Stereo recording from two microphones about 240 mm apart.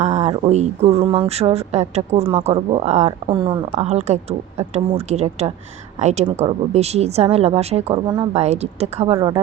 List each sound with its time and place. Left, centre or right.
0.0 s speech: right